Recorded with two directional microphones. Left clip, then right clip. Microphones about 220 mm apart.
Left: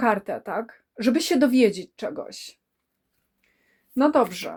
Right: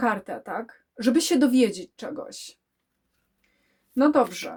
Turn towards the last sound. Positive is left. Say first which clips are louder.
# left 1 dB
turn(degrees=30)  # may be behind; listen again after turning